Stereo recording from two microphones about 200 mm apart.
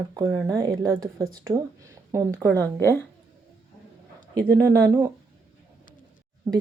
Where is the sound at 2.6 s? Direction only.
10° left (ahead or behind).